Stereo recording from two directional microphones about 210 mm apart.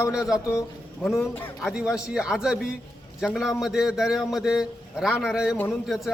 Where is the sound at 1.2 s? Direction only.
10° left (ahead or behind).